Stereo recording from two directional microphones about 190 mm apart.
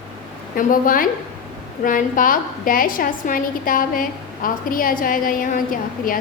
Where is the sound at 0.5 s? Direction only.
45° left (ahead or behind).